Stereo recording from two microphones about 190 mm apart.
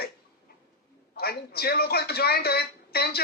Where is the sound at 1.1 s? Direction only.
55° left (ahead or behind).